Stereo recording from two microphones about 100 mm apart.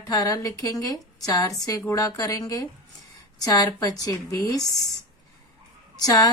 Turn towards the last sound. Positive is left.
turn(degrees=40)  # may be behind; listen again after turning